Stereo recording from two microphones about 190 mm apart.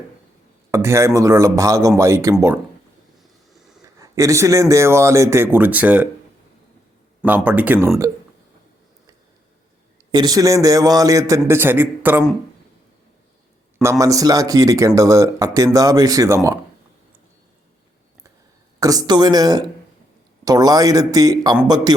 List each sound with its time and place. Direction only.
0.7 s speech: 15° right (ahead or behind)
4.0 s speech: 15° right (ahead or behind)
7.3 s speech: 10° right (ahead or behind)
10.1 s speech: 20° right (ahead or behind)
14.0 s speech: 20° right (ahead or behind)
18.8 s speech: 20° right (ahead or behind)